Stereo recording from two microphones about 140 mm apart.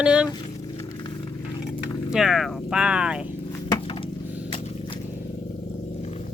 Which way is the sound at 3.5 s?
25° left (ahead or behind).